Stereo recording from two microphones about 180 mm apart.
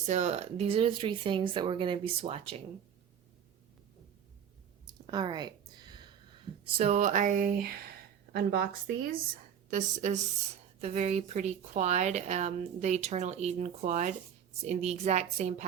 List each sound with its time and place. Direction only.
0.0 s speech: 40° right (ahead or behind)
4.9 s a sound: 25° right (ahead or behind)
6.7 s a woman's voice: 40° right (ahead or behind)